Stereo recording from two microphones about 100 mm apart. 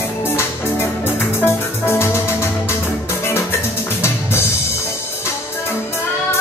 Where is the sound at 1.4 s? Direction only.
25° left (ahead or behind).